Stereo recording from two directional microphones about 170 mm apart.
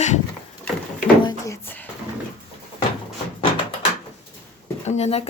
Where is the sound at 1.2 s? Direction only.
25° left (ahead or behind).